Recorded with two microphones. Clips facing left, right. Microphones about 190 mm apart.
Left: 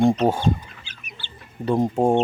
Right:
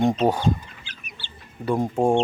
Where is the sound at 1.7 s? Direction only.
25° left (ahead or behind).